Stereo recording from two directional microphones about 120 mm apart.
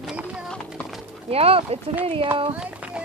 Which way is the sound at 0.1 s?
10° right (ahead or behind).